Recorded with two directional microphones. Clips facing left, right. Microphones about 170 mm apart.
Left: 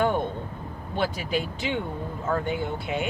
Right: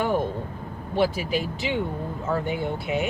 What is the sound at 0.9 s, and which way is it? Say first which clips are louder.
Speech: right 3 dB; 5° right (ahead or behind).